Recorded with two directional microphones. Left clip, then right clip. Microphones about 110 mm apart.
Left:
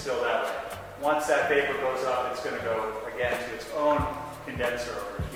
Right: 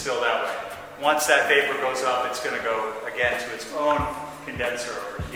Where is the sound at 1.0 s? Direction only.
20° left (ahead or behind).